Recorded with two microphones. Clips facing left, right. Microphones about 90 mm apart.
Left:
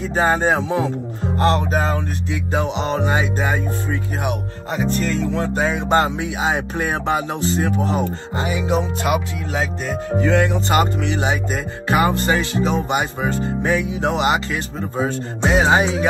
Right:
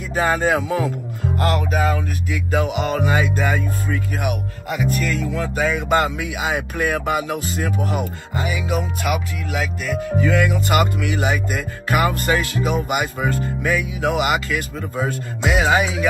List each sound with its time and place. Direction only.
0.1 s speech: 30° left (ahead or behind)
1.4 s music: 30° left (ahead or behind)